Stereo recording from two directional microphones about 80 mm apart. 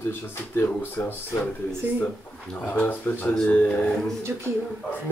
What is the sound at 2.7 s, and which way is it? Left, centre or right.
Speech, left.